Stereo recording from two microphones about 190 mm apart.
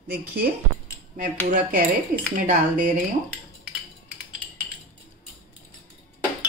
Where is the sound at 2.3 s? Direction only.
45° right (ahead or behind).